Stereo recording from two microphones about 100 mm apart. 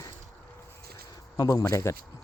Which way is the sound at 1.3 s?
35° left (ahead or behind).